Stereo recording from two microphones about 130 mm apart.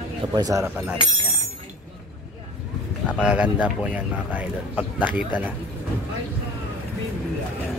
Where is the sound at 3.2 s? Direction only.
10° right (ahead or behind).